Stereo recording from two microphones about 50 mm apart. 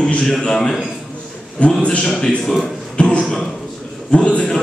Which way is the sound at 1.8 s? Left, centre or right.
Left.